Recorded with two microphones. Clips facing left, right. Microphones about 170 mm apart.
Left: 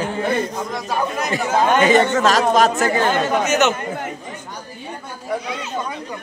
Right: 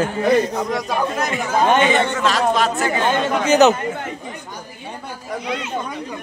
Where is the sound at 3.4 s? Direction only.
35° right (ahead or behind).